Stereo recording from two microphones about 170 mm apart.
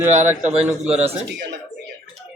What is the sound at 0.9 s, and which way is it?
Speech, 40° right (ahead or behind).